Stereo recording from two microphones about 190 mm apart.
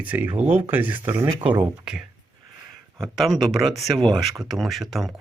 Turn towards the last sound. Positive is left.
turn(degrees=0)  # may be behind; listen again after turning